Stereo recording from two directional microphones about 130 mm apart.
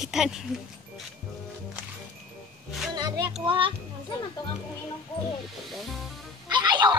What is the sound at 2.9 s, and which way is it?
Music, 35° right (ahead or behind).